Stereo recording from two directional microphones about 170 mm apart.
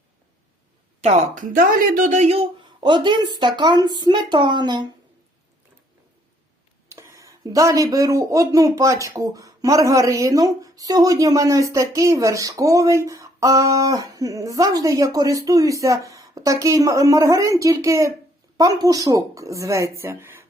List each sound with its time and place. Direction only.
1.0 s speech: 40° right (ahead or behind)
1.5 s speech: 55° right (ahead or behind); by 4.9 s 25° right (ahead or behind)
6.9 s speech: 15° right (ahead or behind)